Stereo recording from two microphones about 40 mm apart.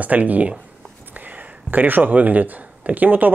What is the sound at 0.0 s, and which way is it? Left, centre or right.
Speech, right.